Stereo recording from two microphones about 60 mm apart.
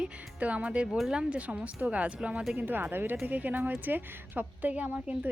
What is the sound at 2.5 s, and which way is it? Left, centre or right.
Speech, right.